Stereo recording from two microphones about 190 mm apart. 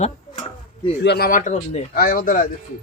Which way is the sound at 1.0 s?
55° left (ahead or behind).